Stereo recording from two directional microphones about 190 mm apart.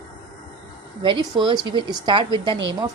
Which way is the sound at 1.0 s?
25° right (ahead or behind).